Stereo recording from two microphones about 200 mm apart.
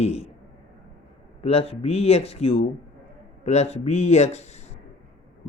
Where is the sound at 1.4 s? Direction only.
30° left (ahead or behind).